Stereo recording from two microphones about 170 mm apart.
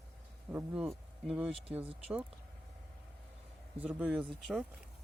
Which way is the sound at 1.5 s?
35° right (ahead or behind).